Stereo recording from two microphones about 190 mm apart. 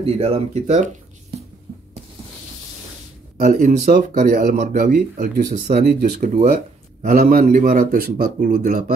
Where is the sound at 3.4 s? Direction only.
45° right (ahead or behind).